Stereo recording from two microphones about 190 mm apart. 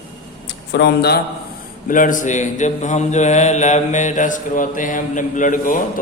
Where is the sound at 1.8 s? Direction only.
45° left (ahead or behind).